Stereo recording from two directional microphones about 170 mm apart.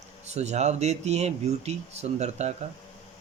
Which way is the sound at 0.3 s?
40° right (ahead or behind).